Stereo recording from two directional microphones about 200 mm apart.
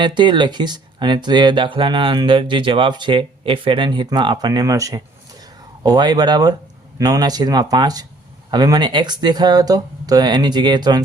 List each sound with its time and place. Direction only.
0.0 s speech: 20° right (ahead or behind)